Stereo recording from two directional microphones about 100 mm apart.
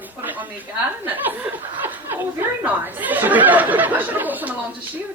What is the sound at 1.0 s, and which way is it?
Speech, 20° right (ahead or behind).